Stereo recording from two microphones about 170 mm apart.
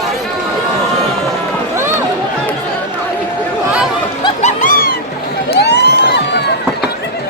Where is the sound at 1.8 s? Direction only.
15° right (ahead or behind).